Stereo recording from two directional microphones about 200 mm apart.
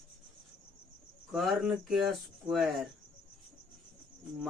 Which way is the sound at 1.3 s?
Centre (ahead or behind).